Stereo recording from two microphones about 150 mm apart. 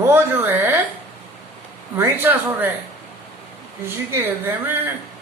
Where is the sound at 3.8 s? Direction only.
15° right (ahead or behind).